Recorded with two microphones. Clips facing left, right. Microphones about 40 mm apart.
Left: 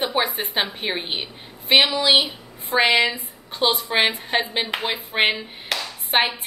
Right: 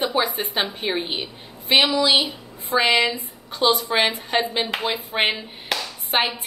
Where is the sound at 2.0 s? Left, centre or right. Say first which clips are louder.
Left 1 dB; centre.